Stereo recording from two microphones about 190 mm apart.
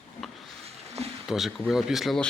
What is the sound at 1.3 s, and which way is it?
Speech, centre (ahead or behind).